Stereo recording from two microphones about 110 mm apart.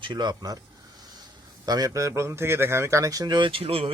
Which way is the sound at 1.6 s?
35° right (ahead or behind).